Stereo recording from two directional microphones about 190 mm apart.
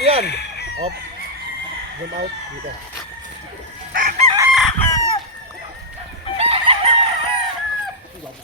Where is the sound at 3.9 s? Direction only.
50° right (ahead or behind).